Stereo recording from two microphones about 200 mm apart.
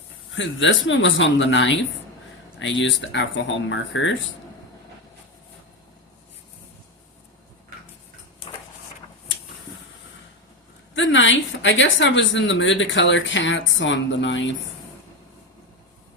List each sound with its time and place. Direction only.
0.3 s a woman's voice: 70° left (ahead or behind)
10.9 s a woman's voice: 70° left (ahead or behind)